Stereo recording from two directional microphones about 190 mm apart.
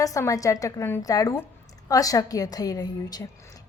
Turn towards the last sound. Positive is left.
turn(degrees=20)  # may be behind; listen again after turning